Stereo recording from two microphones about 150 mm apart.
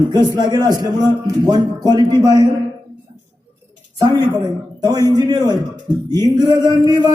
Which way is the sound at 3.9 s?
25° right (ahead or behind).